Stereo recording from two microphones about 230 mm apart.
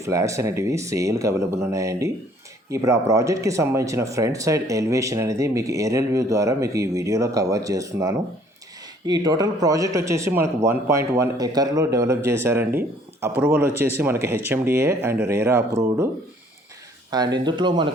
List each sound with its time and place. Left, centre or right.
0.0 s speech: centre
17.1 s speech: centre